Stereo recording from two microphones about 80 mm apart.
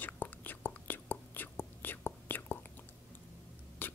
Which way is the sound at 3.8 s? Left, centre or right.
Left.